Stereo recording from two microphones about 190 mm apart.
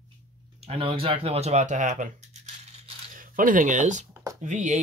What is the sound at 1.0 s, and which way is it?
Speech, 30° right (ahead or behind).